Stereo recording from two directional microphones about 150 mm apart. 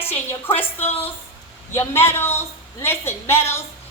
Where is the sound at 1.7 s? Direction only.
15° left (ahead or behind).